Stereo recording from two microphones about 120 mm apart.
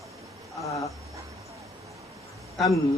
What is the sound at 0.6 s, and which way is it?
Speech, 25° left (ahead or behind).